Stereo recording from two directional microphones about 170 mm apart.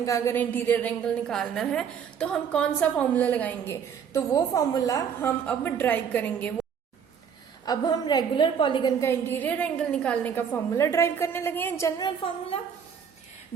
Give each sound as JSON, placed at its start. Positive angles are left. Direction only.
{"t": 0.0, "sound": "a woman's voice", "side_deg": 15}
{"t": 7.6, "sound": "a woman's voice", "side_deg": 25}
{"t": 9.0, "sound": "a woman's voice", "side_deg": 15}
{"t": 11.9, "sound": "a woman's voice", "side_deg": 30}